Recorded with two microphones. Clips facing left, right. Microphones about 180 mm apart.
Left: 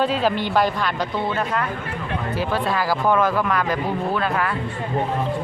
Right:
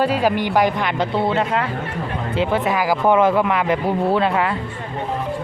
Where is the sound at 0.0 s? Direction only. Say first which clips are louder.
Right 2 dB; 10° right (ahead or behind).